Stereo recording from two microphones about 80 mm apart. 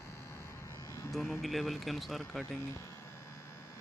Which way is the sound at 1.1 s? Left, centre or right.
Centre.